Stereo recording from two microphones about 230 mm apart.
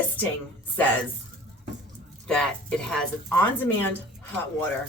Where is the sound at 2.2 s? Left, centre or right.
Centre.